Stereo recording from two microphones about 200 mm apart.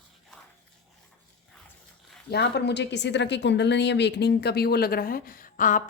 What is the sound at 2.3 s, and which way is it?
A woman's voice, 55° left (ahead or behind).